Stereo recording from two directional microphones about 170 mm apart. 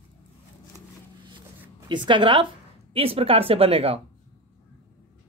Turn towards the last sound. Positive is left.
turn(degrees=-35)  # may be behind; listen again after turning